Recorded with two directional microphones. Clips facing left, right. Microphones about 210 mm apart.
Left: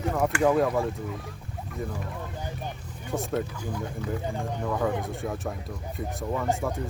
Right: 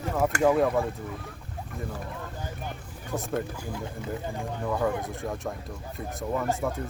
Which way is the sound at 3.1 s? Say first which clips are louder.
Left 2 dB; 5° right (ahead or behind).